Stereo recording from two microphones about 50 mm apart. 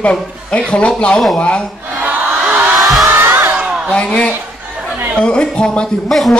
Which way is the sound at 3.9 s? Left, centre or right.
Left.